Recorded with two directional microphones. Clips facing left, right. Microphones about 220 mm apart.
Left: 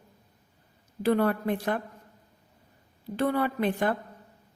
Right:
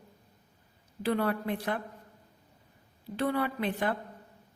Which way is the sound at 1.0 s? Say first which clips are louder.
Left 5 dB; 50° left (ahead or behind).